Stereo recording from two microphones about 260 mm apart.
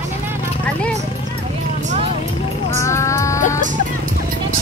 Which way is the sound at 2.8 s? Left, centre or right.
Centre.